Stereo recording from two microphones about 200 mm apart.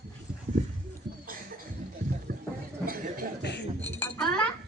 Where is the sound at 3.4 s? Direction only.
60° left (ahead or behind).